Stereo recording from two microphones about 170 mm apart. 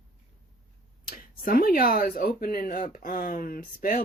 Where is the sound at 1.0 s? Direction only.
55° left (ahead or behind).